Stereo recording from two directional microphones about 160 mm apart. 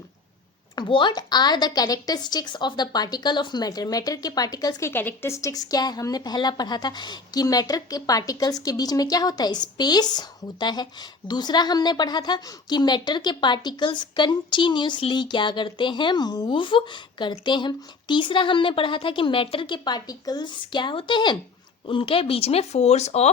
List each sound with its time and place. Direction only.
0.8 s a woman's voice: 30° left (ahead or behind)